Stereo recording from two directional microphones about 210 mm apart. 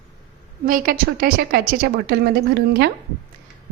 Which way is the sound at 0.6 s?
40° right (ahead or behind).